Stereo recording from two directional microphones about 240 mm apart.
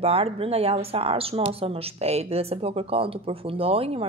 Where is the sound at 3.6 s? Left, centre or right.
Right.